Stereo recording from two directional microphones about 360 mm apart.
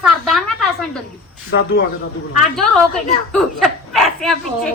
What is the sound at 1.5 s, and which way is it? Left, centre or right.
Speech, left.